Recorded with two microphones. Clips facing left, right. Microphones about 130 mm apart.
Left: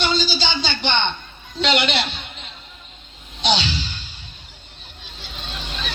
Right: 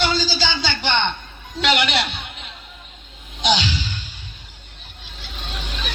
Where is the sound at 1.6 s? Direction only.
25° left (ahead or behind).